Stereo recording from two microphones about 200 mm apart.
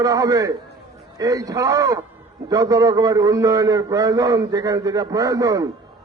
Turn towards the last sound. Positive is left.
turn(degrees=-15)  # may be behind; listen again after turning